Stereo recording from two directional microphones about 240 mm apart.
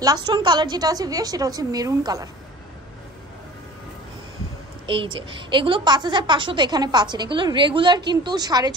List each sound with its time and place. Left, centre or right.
0.0 s a woman's voice: centre
4.8 s a woman's voice: right